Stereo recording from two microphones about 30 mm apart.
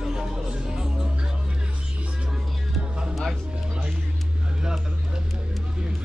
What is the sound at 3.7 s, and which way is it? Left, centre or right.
Speech, right.